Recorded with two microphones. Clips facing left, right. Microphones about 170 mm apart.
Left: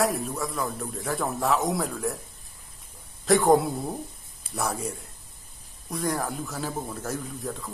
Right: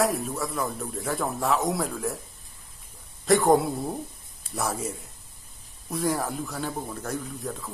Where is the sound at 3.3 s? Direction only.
Centre (ahead or behind).